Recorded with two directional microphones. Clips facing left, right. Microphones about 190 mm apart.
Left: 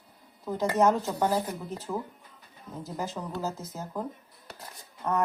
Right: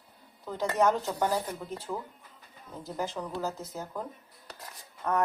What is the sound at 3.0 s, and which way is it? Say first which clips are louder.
Speech: right 1 dB; centre (ahead or behind).